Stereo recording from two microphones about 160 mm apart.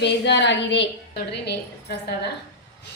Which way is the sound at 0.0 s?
90° left.